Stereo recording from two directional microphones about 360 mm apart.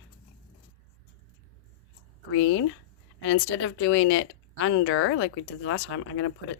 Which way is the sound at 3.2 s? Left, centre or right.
Left.